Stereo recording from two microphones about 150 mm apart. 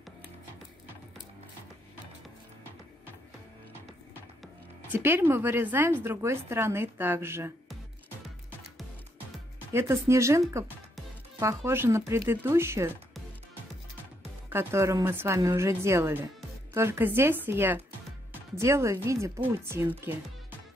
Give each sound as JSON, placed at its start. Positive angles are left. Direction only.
{"t": 4.9, "sound": "a woman's voice", "side_deg": -15}
{"t": 9.7, "sound": "a woman's voice", "side_deg": -15}
{"t": 14.5, "sound": "a woman's voice", "side_deg": -15}